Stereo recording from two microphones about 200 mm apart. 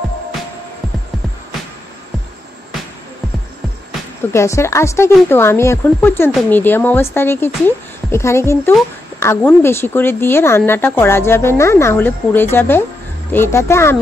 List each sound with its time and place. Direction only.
4.3 s speech: 15° left (ahead or behind)